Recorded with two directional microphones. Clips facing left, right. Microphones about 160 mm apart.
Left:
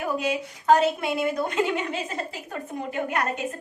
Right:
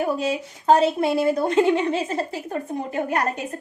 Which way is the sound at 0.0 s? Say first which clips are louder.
Right 3 dB; 30° right (ahead or behind).